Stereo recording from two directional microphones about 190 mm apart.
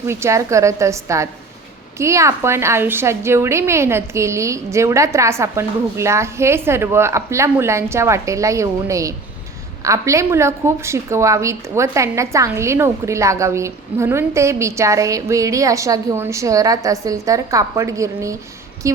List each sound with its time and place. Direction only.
0.1 s a woman's voice: 15° right (ahead or behind)